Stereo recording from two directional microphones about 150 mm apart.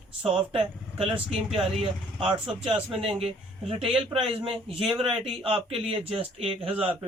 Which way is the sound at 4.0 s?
35° right (ahead or behind).